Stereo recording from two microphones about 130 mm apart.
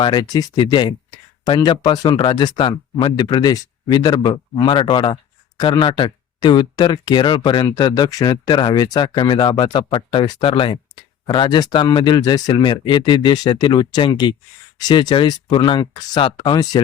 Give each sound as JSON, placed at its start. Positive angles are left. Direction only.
{"t": 0.0, "sound": "speech", "side_deg": 35}